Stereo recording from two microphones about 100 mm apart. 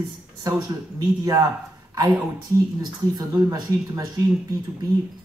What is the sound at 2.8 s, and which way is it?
A woman's voice, 45° right (ahead or behind).